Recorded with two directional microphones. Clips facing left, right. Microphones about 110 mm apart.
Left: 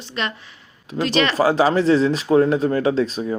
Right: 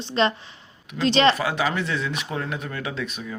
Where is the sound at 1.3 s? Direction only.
35° left (ahead or behind).